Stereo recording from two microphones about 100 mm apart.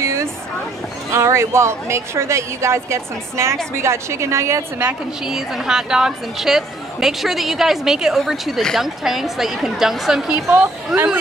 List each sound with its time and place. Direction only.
0.0 s vehicle: 30° right (ahead or behind)
1.1 s a woman's voice: 30° right (ahead or behind)
5.2 s speech: 5° right (ahead or behind)